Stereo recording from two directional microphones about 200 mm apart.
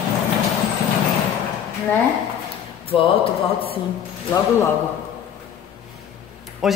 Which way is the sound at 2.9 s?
25° left (ahead or behind).